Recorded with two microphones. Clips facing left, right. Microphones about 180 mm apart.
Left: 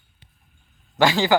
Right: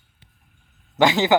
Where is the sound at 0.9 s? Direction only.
20° right (ahead or behind).